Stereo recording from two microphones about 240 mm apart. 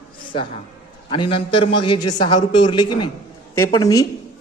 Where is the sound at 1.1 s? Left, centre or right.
Left.